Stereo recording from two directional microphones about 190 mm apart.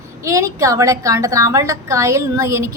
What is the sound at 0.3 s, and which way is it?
A woman's voice, 15° right (ahead or behind).